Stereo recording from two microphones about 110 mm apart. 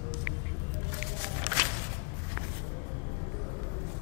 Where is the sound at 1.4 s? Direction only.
15° left (ahead or behind).